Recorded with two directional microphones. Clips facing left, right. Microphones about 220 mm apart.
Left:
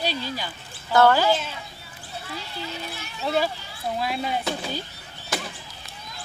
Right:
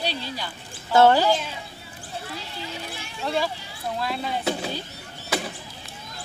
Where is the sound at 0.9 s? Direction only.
25° right (ahead or behind).